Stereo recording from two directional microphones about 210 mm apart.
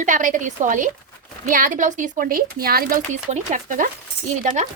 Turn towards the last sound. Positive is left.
turn(degrees=-35)  # may be behind; listen again after turning